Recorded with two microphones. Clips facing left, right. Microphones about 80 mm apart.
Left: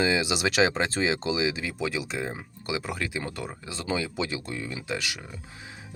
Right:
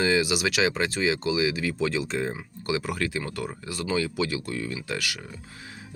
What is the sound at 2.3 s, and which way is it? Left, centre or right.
Speech, centre.